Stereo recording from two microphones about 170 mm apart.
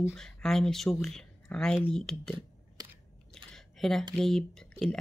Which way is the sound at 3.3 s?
5° left (ahead or behind).